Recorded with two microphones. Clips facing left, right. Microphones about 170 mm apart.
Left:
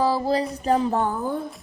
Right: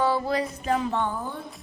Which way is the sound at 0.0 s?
35° left (ahead or behind).